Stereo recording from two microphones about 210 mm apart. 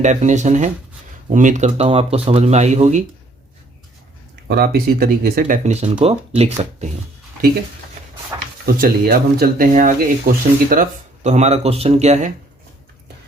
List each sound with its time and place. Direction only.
0.0 s speech: 35° right (ahead or behind)
4.4 s speech: 50° right (ahead or behind); by 6.9 s 30° right (ahead or behind)
8.6 s speech: 45° right (ahead or behind)